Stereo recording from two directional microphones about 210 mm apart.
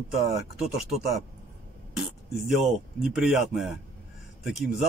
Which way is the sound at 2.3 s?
Centre (ahead or behind).